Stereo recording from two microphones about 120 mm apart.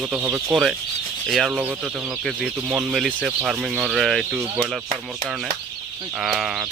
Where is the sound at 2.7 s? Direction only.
5° right (ahead or behind).